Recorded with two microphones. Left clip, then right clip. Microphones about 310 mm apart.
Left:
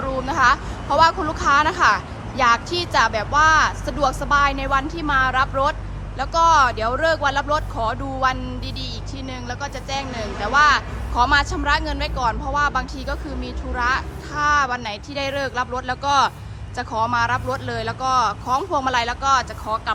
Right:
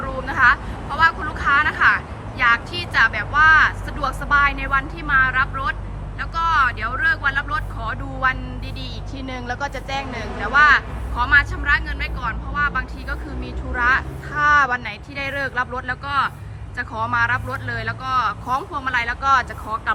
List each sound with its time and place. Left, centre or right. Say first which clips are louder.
0.3 s a woman's voice: right 2 dB; centre